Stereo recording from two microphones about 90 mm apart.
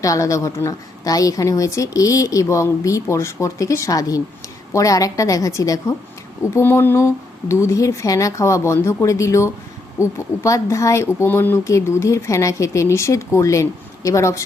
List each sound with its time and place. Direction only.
0.0 s a woman's voice: 40° left (ahead or behind)